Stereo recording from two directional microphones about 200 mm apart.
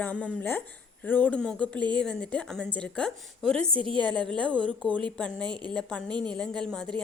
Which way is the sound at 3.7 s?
25° right (ahead or behind).